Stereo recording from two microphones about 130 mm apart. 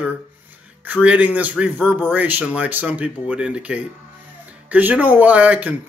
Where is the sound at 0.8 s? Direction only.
10° right (ahead or behind).